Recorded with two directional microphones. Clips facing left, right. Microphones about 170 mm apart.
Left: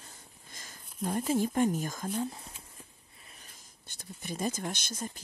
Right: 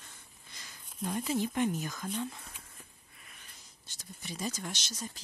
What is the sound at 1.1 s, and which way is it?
Speech, 45° left (ahead or behind).